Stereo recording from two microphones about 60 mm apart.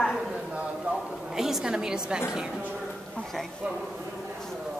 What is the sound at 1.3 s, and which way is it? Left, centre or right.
Speech, centre.